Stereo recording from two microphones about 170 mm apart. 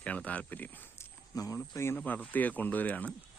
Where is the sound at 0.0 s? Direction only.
10° left (ahead or behind).